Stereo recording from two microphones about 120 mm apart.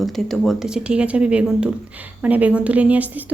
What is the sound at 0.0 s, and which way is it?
Speech, centre (ahead or behind).